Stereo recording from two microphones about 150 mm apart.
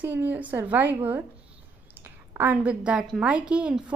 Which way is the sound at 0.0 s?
10° right (ahead or behind).